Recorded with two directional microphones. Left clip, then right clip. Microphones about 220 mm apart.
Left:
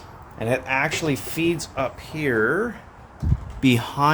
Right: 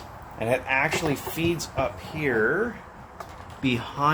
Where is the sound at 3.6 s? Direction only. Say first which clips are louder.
Left 5 dB; 40° left (ahead or behind).